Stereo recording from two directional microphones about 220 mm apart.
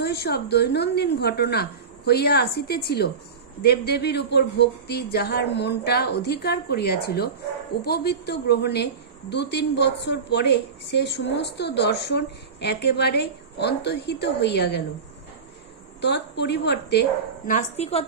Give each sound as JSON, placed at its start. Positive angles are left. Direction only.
{"t": 0.0, "sound": "a woman's voice", "side_deg": 45}
{"t": 16.0, "sound": "a woman's voice", "side_deg": 50}